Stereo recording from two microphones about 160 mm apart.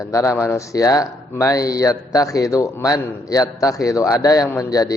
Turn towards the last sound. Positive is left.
turn(degrees=20)  # may be behind; listen again after turning